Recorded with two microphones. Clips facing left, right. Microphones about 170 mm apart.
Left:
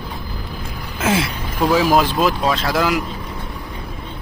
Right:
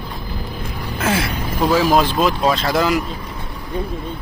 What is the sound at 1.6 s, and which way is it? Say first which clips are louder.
Speech: even; 5° left (ahead or behind).